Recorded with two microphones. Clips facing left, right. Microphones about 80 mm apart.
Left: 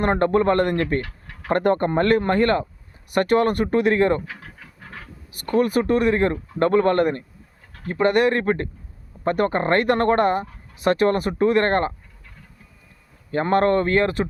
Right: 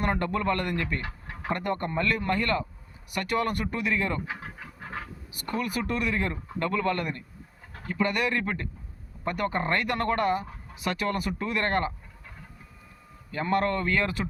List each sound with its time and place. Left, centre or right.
0.0 s speech: left
1.0 s a sound: centre
1.5 s speech: left
4.3 s dog: centre
5.3 s speech: left
13.3 s speech: left